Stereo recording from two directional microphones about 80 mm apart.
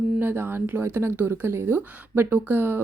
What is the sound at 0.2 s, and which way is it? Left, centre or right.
Speech, right.